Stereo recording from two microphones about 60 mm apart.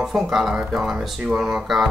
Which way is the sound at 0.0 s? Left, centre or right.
Centre.